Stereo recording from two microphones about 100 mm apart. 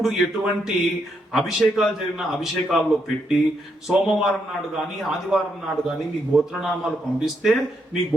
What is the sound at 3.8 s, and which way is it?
Speech, 5° right (ahead or behind).